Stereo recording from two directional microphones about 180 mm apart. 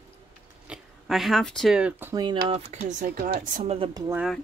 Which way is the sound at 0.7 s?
Centre (ahead or behind).